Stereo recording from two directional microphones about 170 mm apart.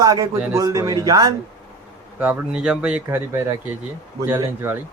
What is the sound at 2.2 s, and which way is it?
Speech, 10° right (ahead or behind).